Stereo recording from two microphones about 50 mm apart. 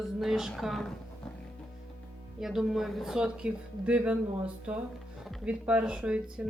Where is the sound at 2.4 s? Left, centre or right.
Centre.